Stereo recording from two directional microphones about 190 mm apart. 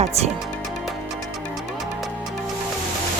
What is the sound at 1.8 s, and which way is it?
Music, centre (ahead or behind).